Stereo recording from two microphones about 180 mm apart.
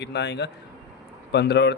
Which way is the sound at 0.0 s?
70° left (ahead or behind).